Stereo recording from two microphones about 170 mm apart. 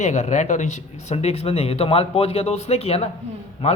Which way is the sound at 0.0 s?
45° left (ahead or behind).